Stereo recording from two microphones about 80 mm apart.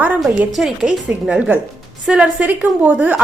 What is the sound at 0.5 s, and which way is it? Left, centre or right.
Speech, centre.